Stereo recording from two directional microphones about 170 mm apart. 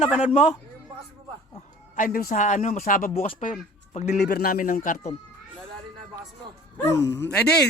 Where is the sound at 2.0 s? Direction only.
55° left (ahead or behind).